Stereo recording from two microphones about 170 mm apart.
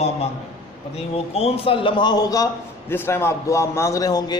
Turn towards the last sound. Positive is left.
turn(degrees=20)  # may be behind; listen again after turning